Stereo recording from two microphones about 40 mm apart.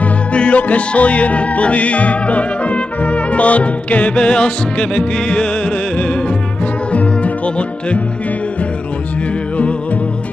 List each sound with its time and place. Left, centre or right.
0.0 s music: left